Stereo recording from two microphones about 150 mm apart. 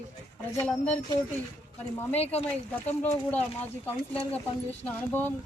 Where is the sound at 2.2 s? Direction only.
45° left (ahead or behind).